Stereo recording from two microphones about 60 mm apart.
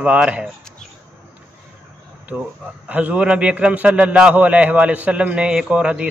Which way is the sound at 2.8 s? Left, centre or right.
Right.